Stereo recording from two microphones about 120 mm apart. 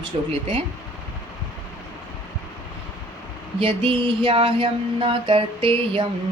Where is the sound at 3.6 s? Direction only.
50° right (ahead or behind).